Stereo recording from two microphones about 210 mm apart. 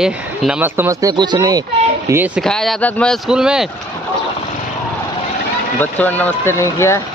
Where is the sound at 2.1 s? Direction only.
10° right (ahead or behind).